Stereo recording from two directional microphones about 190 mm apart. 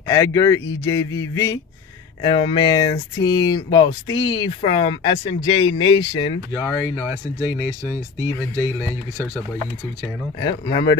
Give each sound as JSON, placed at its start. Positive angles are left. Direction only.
{"t": 0.0, "sound": "a man's voice", "side_deg": 20}
{"t": 8.3, "sound": "a man's voice", "side_deg": 10}
{"t": 10.4, "sound": "speech", "side_deg": 20}